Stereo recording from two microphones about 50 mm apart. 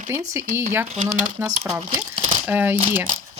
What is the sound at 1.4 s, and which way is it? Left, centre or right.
Speech, right.